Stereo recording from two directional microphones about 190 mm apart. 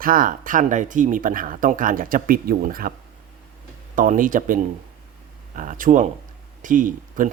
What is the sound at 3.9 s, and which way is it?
Speech, 45° right (ahead or behind).